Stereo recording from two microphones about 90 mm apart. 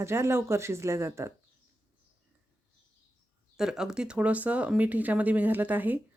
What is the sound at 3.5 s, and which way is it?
Speech, 5° right (ahead or behind).